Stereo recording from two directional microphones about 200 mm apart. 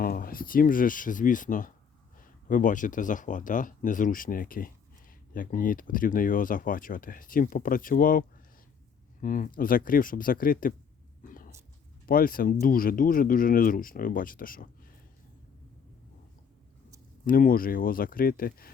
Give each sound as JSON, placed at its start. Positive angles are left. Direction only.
{"t": 0.0, "sound": "speech", "side_deg": 45}
{"t": 9.2, "sound": "speech", "side_deg": 40}
{"t": 11.2, "sound": "a sound", "side_deg": 45}
{"t": 12.0, "sound": "speech", "side_deg": 45}
{"t": 17.2, "sound": "speech", "side_deg": 45}